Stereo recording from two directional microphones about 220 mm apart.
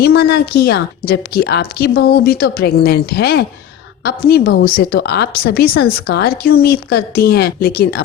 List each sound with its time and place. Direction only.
0.0 s a woman's voice: 45° left (ahead or behind)